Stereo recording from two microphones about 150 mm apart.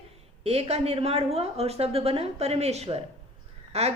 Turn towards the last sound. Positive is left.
turn(degrees=-45)  # may be behind; listen again after turning